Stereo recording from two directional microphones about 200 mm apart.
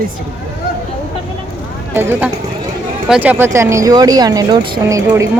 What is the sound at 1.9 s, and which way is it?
Speech, 10° right (ahead or behind).